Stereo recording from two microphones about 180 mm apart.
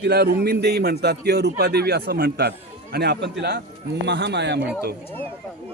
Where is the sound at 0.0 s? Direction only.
60° right (ahead or behind).